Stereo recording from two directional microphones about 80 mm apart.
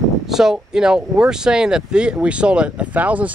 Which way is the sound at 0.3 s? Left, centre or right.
Centre.